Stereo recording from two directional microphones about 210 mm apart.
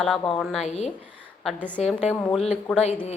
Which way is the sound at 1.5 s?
5° left (ahead or behind).